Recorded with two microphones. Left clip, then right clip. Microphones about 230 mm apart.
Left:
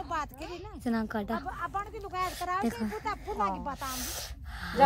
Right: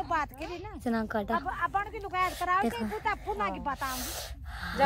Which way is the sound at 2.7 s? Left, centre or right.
Centre.